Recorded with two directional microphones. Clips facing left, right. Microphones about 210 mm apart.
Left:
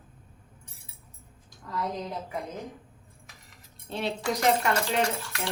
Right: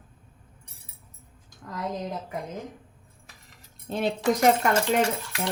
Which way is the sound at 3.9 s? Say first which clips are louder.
Right 5 dB; 50° right (ahead or behind).